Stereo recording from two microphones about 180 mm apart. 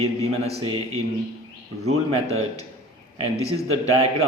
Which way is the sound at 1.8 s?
35° right (ahead or behind).